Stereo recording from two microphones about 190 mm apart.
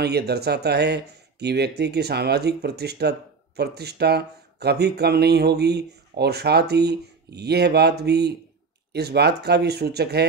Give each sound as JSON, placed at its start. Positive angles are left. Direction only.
{"t": 0.0, "sound": "speech", "side_deg": -60}